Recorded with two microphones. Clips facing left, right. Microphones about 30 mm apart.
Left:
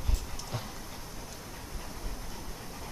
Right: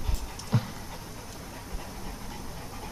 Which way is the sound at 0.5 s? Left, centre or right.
Centre.